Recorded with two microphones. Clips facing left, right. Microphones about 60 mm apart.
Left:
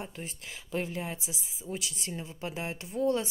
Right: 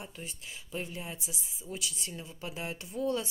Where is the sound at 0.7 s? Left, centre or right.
Left.